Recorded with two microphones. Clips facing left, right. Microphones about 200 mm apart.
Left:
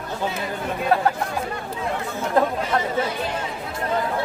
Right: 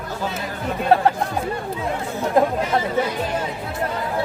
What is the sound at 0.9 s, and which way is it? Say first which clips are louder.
Speech: right 4 dB; 30° right (ahead or behind).